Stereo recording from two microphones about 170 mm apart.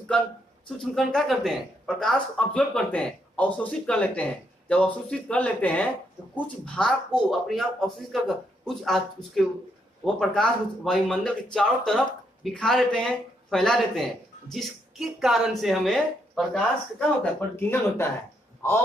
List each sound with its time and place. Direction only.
0.7 s speech: centre (ahead or behind)
17.2 s speech: 15° left (ahead or behind)